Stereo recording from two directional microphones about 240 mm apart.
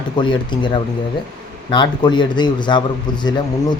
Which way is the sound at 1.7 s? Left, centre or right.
Centre.